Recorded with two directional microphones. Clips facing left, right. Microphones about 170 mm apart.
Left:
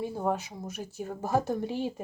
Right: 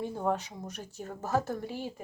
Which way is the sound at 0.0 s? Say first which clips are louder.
Left 1 dB; 10° left (ahead or behind).